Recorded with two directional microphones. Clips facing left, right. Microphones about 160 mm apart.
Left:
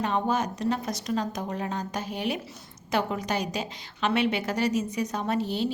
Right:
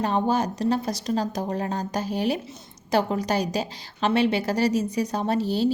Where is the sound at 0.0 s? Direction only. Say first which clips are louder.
Right 3 dB; 35° right (ahead or behind).